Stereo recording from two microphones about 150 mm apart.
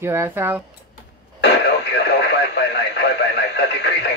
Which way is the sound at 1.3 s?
90° left.